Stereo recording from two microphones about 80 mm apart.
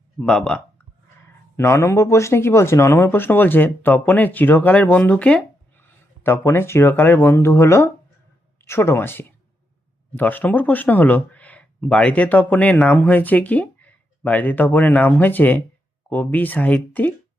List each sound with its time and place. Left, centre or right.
0.2 s speech: centre
1.5 s speech: left; by 5.4 s centre
5.8 s speech: left